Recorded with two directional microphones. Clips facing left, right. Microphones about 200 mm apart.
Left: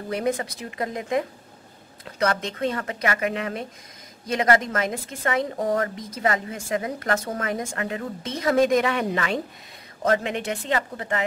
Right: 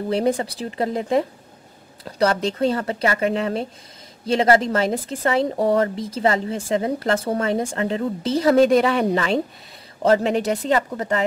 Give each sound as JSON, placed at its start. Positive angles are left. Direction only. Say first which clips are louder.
{"t": 0.1, "sound": "a woman's voice", "louder": "right 4 dB", "side_deg": -30}